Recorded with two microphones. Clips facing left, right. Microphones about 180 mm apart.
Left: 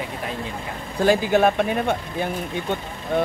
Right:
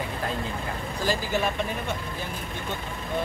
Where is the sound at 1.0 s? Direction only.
60° left (ahead or behind).